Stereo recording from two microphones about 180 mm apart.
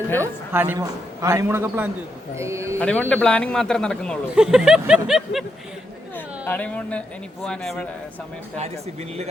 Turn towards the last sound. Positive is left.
turn(degrees=5)  # may be behind; listen again after turning